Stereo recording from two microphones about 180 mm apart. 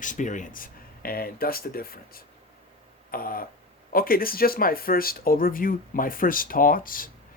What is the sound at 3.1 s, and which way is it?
Speech, 55° left (ahead or behind).